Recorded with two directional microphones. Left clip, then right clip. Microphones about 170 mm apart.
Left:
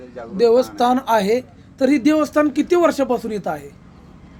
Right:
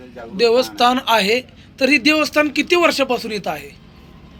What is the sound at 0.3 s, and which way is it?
Speech, 40° left (ahead or behind).